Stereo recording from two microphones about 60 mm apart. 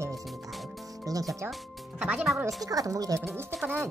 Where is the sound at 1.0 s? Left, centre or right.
Right.